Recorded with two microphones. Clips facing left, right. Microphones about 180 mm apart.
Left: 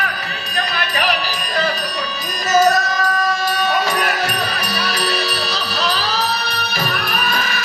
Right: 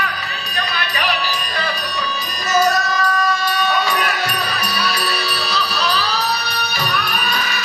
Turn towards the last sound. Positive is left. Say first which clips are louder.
# left 1 dB
turn(degrees=50)  # may be behind; listen again after turning